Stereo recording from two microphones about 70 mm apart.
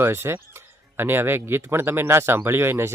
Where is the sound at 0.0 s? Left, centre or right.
Right.